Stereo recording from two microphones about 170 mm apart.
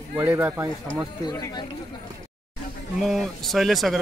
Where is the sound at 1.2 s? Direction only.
25° left (ahead or behind).